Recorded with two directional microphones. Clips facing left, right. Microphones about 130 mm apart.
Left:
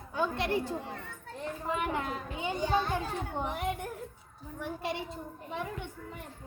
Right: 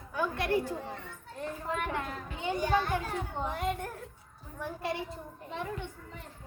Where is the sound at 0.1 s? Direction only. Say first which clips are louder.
Even; 25° left (ahead or behind).